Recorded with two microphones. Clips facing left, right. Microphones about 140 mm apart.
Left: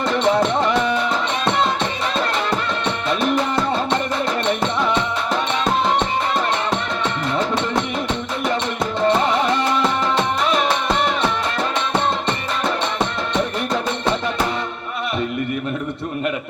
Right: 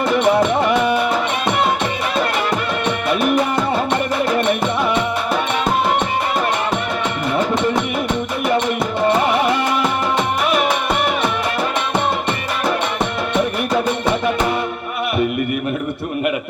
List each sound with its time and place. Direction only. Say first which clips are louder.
0.1 s music: right 2 dB; 10° right (ahead or behind)
2.1 s music: right 2 dB; 10° right (ahead or behind)
7.3 s music: right 4 dB; 10° right (ahead or behind)
9.0 s music: right 1 dB; 10° right (ahead or behind)
12.6 s music: right 2 dB; 10° right (ahead or behind)